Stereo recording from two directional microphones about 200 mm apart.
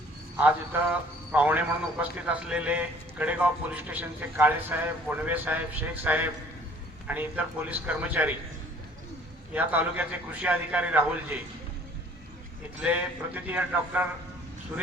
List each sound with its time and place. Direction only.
0.3 s a man's voice: 10° right (ahead or behind)
9.5 s a man's voice: 5° right (ahead or behind)
12.8 s a man's voice: 10° right (ahead or behind)